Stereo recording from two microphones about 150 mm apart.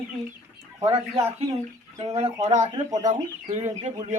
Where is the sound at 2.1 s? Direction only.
45° right (ahead or behind).